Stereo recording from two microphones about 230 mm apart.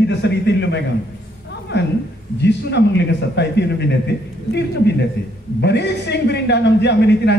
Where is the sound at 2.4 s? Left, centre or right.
Left.